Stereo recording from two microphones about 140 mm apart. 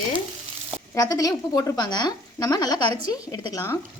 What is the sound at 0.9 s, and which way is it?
Speech, 25° left (ahead or behind).